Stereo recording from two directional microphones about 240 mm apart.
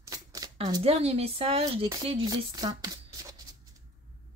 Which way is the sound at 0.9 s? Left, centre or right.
Right.